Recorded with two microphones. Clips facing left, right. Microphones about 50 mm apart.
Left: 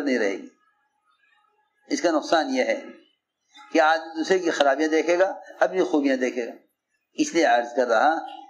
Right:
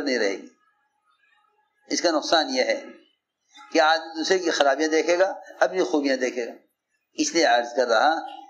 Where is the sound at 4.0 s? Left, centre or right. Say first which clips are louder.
Left 1 dB; right.